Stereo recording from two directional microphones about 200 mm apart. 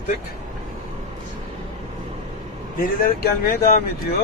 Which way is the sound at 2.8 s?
50° left (ahead or behind).